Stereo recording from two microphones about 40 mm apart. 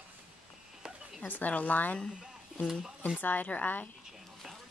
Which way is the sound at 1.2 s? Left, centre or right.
Left.